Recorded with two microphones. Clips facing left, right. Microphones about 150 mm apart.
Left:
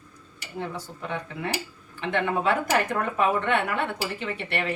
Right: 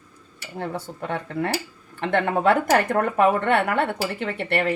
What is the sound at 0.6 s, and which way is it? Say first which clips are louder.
A woman's voice: right 4 dB; 60° right (ahead or behind).